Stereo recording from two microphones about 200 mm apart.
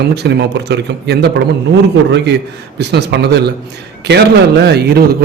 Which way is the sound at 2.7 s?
55° right (ahead or behind).